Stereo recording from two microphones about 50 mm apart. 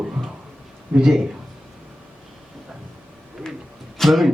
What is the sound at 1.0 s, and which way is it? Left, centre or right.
Speech, centre.